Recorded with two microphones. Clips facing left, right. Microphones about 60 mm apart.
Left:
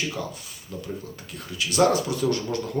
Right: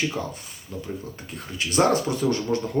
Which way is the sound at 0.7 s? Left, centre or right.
Right.